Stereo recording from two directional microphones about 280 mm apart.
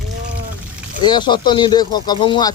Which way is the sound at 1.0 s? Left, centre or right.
Centre.